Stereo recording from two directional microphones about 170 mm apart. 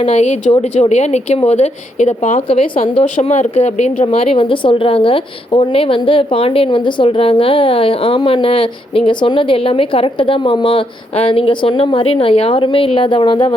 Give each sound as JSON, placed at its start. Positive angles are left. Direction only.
{"t": 0.0, "sound": "a woman's voice", "side_deg": 40}
{"t": 3.0, "sound": "a woman's voice", "side_deg": 45}